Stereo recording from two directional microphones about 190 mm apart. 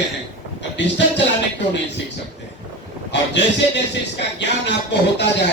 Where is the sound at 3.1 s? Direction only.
65° left (ahead or behind).